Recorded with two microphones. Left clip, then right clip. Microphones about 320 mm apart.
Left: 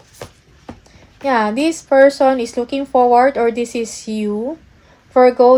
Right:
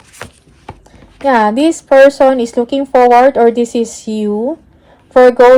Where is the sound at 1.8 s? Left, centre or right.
Right.